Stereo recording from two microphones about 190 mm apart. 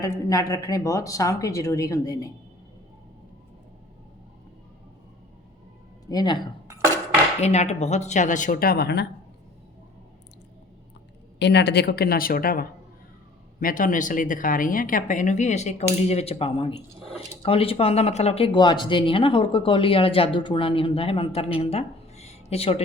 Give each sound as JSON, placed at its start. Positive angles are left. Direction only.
{"t": 0.0, "sound": "speech", "side_deg": 20}
{"t": 6.1, "sound": "speech", "side_deg": 20}
{"t": 7.4, "sound": "speech", "side_deg": 35}
{"t": 11.3, "sound": "speech", "side_deg": 65}
{"t": 21.6, "sound": "a sound", "side_deg": 35}